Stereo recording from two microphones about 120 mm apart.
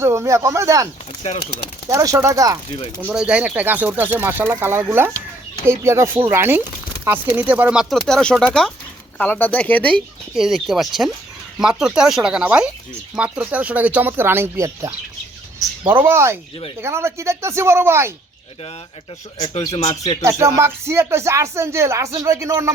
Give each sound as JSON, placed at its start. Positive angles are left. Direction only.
{"t": 0.0, "sound": "speech", "side_deg": -25}
{"t": 1.9, "sound": "speech", "side_deg": -25}
{"t": 3.0, "sound": "speech", "side_deg": -10}
{"t": 8.0, "sound": "speech", "side_deg": 5}
{"t": 10.3, "sound": "speech", "side_deg": 0}
{"t": 15.9, "sound": "speech", "side_deg": -20}
{"t": 20.2, "sound": "speech", "side_deg": -25}